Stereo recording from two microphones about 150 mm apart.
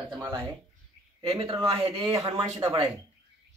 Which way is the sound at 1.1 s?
40° right (ahead or behind).